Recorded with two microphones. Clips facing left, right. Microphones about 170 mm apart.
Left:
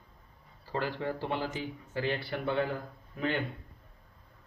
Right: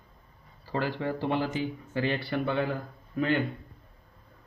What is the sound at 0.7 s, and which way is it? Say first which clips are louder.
Speech: right 3 dB; 90° right.